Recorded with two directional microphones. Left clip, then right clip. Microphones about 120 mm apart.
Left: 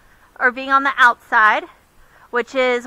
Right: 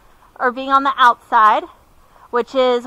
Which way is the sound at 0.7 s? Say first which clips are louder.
Right 2 dB; 35° left (ahead or behind).